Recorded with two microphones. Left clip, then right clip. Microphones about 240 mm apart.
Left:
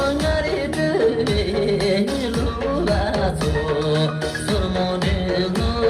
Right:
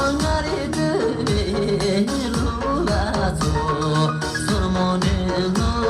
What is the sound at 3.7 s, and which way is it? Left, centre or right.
Music, right.